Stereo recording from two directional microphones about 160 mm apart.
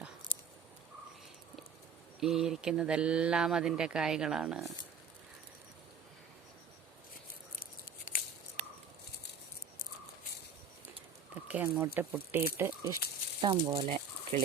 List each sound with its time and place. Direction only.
2.2 s speech: 5° right (ahead or behind)
7.6 s a sound: 60° left (ahead or behind)
11.4 s speech: 10° right (ahead or behind)
13.4 s speech: 30° right (ahead or behind)